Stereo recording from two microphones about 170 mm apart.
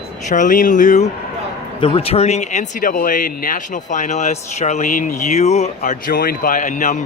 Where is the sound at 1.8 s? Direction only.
30° left (ahead or behind).